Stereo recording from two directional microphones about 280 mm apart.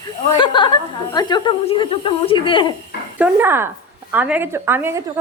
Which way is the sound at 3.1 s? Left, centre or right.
Centre.